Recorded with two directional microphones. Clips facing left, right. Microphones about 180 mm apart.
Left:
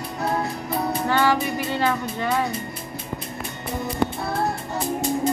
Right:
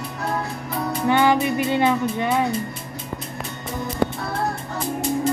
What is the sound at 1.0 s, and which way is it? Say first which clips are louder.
Music: right 5 dB; 20° right (ahead or behind).